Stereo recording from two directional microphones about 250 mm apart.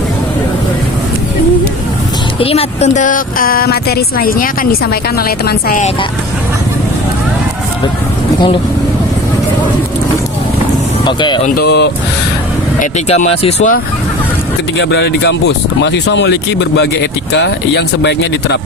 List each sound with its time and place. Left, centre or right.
2.4 s a woman's voice: left
11.0 s speech: centre
11.5 s a woman's voice: left
12.8 s speech: left
14.8 s speech: left